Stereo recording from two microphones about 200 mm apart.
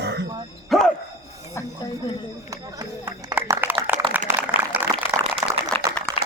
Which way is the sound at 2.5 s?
20° right (ahead or behind).